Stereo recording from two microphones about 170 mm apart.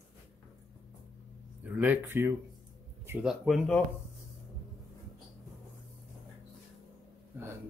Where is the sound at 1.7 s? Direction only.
10° right (ahead or behind).